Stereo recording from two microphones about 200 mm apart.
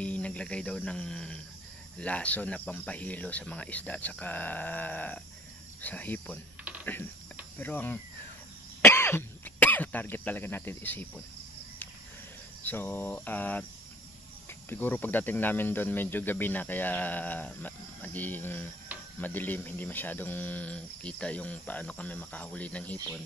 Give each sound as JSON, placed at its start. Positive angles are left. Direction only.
{"t": 0.0, "sound": "speech", "side_deg": 5}
{"t": 6.6, "sound": "typing", "side_deg": -5}
{"t": 7.5, "sound": "speech", "side_deg": 10}
{"t": 12.6, "sound": "speech", "side_deg": 10}
{"t": 14.7, "sound": "speech", "side_deg": 10}